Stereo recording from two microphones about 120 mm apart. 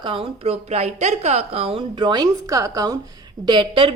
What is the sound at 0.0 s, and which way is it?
A woman's voice, 45° right (ahead or behind).